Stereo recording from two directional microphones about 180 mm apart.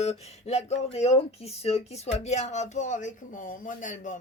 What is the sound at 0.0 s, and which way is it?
Speech, 35° left (ahead or behind).